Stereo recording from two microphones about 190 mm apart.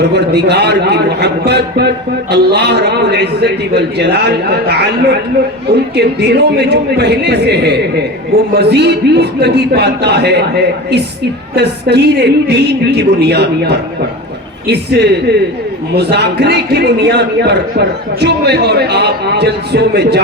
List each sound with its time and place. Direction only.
0.0 s a man's voice: 60° right (ahead or behind)